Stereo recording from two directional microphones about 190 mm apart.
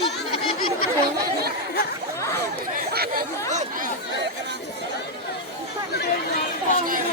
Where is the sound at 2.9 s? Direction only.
55° right (ahead or behind).